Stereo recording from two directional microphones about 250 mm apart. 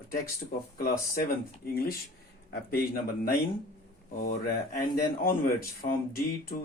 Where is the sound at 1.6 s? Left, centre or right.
Left.